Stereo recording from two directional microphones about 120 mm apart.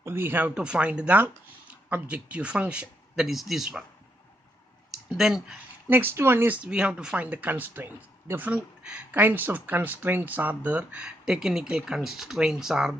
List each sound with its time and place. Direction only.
0.0 s speech: 20° right (ahead or behind)
4.9 s speech: 5° right (ahead or behind)
5.9 s speech: 20° right (ahead or behind)